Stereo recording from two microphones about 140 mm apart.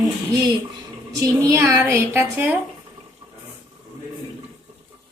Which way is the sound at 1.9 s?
15° right (ahead or behind).